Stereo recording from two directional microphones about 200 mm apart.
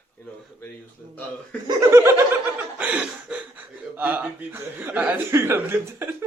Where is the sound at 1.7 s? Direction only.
15° right (ahead or behind).